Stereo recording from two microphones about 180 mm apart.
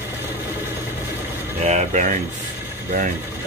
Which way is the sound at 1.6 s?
40° right (ahead or behind).